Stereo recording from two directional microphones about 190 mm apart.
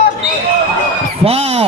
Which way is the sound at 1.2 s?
30° right (ahead or behind).